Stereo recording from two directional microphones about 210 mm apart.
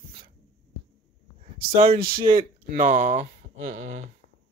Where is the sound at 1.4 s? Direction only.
30° right (ahead or behind).